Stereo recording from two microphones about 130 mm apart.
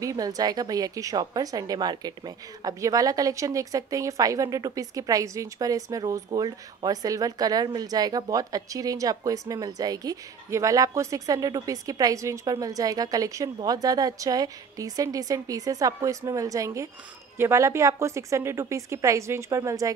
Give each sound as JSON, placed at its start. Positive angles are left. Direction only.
{"t": 0.0, "sound": "a woman's voice", "side_deg": -25}